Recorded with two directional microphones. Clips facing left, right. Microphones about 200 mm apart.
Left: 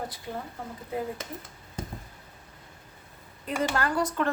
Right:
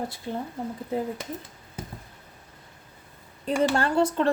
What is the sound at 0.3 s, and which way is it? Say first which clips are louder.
Speech: right 5 dB; 25° right (ahead or behind).